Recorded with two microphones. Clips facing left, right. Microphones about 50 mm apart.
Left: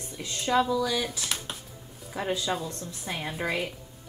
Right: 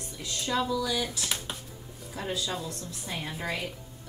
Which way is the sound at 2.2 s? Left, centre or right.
Left.